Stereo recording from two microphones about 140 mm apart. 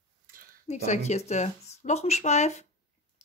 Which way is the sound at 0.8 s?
55° left (ahead or behind).